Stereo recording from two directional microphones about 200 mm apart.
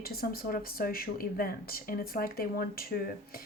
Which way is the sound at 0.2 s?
45° left (ahead or behind).